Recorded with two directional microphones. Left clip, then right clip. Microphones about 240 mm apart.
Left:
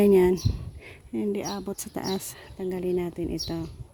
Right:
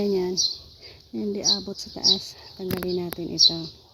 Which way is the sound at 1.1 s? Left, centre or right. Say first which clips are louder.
Right 5 dB; left.